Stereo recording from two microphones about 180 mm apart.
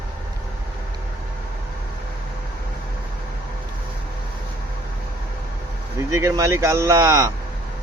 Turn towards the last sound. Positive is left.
turn(degrees=-15)  # may be behind; listen again after turning